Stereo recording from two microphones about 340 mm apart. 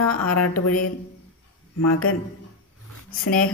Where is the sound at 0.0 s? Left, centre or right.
Left.